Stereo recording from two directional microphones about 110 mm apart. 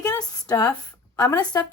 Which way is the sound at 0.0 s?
35° left (ahead or behind).